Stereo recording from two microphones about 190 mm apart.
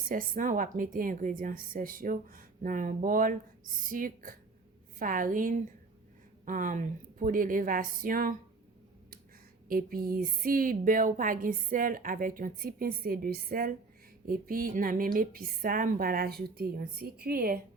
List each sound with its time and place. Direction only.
0.1 s a woman's voice: 45° right (ahead or behind)
9.6 s a woman's voice: 50° right (ahead or behind)